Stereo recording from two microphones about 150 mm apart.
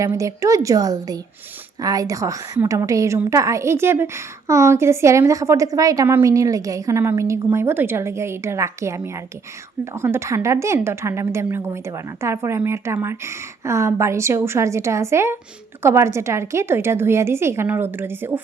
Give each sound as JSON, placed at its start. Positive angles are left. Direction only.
{"t": 0.0, "sound": "a woman's voice", "side_deg": -20}